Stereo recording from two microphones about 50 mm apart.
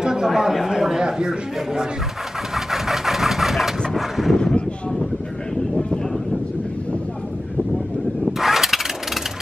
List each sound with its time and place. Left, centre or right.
0.0 s speech: centre
2.5 s vehicle: centre
4.4 s speech: centre
5.6 s vehicle: centre
8.3 s engine starting: centre